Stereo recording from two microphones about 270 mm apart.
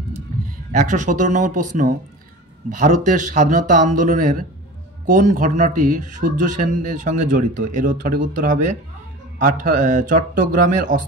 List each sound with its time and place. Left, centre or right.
0.7 s speech: right